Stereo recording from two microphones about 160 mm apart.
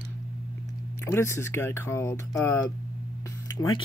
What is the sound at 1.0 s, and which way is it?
Speech, 15° left (ahead or behind).